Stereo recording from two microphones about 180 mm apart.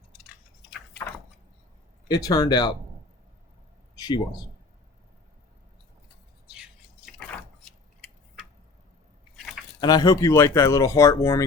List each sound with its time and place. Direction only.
2.0 s speech: 20° left (ahead or behind)
3.9 s a man's voice: 20° left (ahead or behind)
6.5 s a sound: 5° right (ahead or behind)
9.8 s speech: 20° left (ahead or behind)